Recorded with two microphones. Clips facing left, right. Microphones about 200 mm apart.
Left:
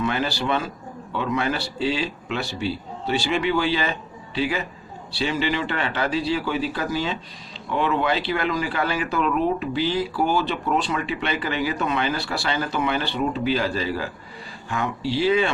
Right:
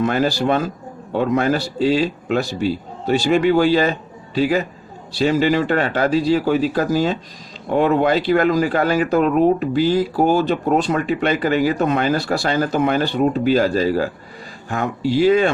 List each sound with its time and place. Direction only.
0.0 s speech: 45° right (ahead or behind)